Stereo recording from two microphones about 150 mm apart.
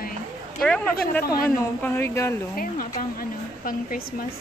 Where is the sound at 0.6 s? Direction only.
5° left (ahead or behind).